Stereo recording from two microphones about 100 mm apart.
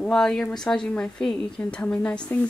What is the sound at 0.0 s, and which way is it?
A woman's voice, 5° left (ahead or behind).